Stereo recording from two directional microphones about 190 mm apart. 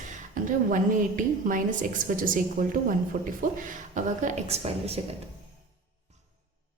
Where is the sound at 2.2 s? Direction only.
45° right (ahead or behind).